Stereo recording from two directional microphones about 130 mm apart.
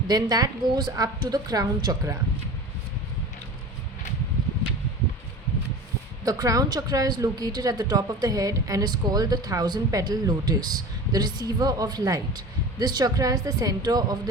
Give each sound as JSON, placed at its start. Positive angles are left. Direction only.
{"t": 0.1, "sound": "a woman's voice", "side_deg": -30}
{"t": 6.2, "sound": "a woman's voice", "side_deg": -25}